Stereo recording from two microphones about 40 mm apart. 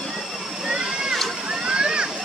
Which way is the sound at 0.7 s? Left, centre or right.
Centre.